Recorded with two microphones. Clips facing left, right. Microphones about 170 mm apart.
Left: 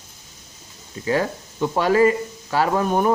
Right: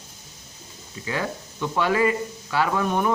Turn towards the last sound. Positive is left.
turn(degrees=40)  # may be behind; listen again after turning